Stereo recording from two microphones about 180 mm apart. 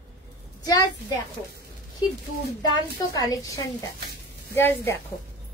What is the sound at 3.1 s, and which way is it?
A woman's voice, 20° left (ahead or behind).